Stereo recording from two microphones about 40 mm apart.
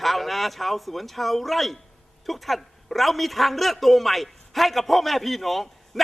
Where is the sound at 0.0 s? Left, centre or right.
Centre.